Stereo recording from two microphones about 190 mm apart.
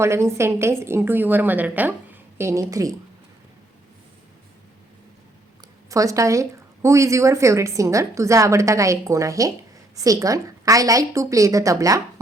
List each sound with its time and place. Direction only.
0.0 s a woman's voice: 15° right (ahead or behind)
5.9 s a woman's voice: 15° right (ahead or behind)